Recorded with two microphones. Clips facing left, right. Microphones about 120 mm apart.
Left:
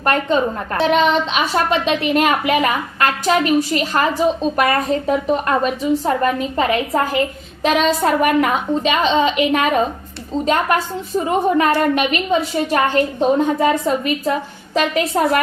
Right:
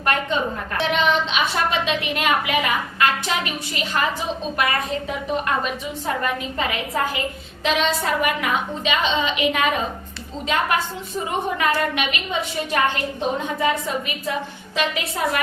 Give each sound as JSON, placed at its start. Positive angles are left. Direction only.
{"t": 0.0, "sound": "a woman's voice", "side_deg": 35}